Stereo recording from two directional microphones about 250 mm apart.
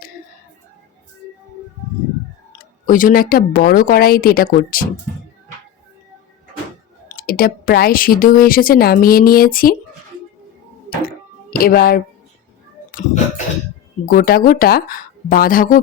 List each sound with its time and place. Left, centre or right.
2.5 s a woman's voice: left
7.1 s a woman's voice: left
11.5 s a woman's voice: left